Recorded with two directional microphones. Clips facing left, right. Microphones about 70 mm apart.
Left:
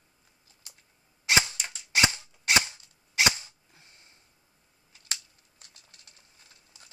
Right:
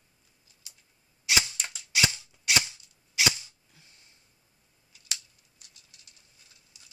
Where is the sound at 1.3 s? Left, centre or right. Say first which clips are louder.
Left 3 dB; left.